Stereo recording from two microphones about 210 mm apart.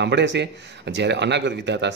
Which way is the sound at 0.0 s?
55° right (ahead or behind).